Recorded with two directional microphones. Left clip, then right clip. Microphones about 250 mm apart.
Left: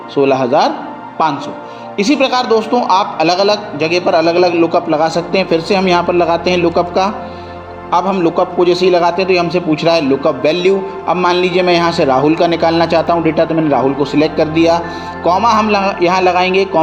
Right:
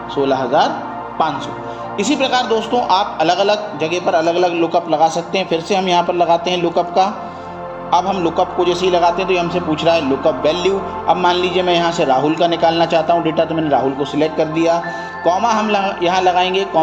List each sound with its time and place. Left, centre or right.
0.2 s a man's voice: left
11.0 s a man's voice: left